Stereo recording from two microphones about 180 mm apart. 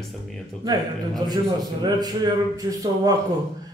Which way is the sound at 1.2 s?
25° right (ahead or behind).